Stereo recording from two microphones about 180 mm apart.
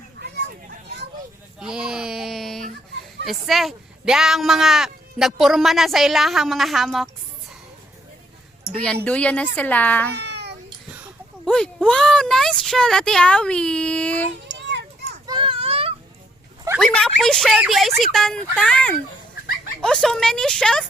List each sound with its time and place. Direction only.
1.5 s speech: 5° right (ahead or behind)
9.0 s speech: 5° left (ahead or behind)
10.2 s babbling: 65° right (ahead or behind)
11.4 s speech: 5° left (ahead or behind)
14.5 s children playing: 80° right
15.3 s children playing: 30° right (ahead or behind)
16.7 s speech: 5° left (ahead or behind)